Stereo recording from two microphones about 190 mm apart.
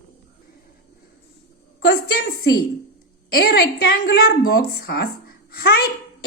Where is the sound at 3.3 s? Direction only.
55° left (ahead or behind).